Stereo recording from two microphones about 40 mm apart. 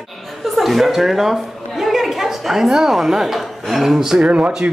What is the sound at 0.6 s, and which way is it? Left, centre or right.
A woman's voice, centre.